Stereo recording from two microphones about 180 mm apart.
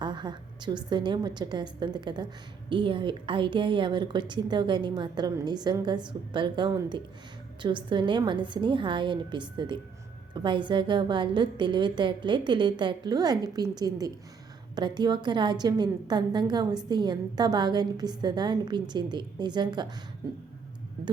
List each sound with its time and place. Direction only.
0.0 s a woman's voice: 25° right (ahead or behind)